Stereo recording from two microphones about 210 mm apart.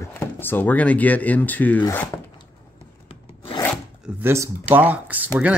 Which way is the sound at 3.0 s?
25° left (ahead or behind).